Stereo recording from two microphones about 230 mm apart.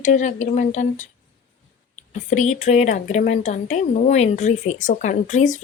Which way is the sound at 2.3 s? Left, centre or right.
Left.